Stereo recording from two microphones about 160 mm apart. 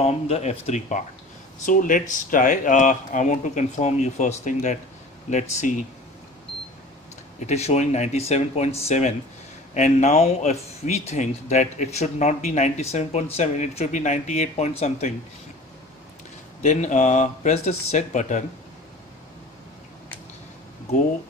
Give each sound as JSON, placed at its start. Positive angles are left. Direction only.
{"t": 0.0, "sound": "speech", "side_deg": 40}
{"t": 7.3, "sound": "speech", "side_deg": 45}
{"t": 16.6, "sound": "speech", "side_deg": 50}